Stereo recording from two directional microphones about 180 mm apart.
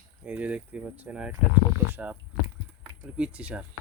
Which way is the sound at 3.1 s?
5° right (ahead or behind).